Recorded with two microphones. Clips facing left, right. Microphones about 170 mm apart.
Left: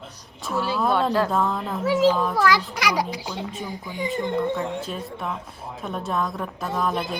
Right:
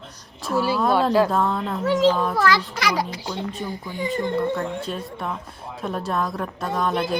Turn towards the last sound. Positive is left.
turn(degrees=0)  # may be behind; listen again after turning